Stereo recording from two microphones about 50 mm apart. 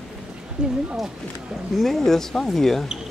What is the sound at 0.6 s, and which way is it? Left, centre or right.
Speech, centre.